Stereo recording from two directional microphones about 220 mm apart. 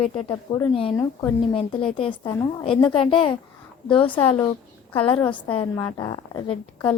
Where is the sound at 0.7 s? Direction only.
25° left (ahead or behind).